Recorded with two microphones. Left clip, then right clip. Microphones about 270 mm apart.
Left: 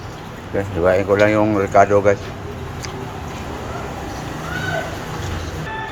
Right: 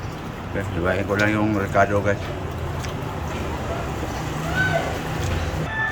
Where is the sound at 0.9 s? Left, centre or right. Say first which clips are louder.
Left 7 dB; left.